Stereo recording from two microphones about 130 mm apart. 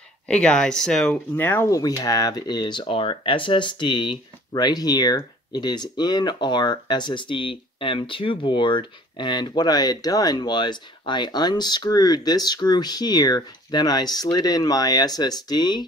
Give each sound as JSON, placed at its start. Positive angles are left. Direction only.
{"t": 0.3, "sound": "speech", "side_deg": 5}